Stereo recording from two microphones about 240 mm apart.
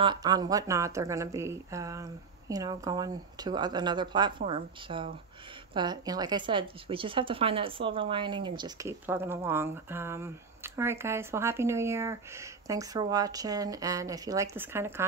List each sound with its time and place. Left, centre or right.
0.0 s a woman's voice: centre